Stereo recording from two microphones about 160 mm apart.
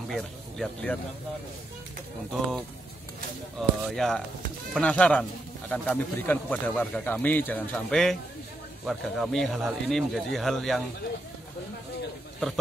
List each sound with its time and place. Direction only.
0.1 s speech: 5° left (ahead or behind)
3.5 s speech: 5° left (ahead or behind)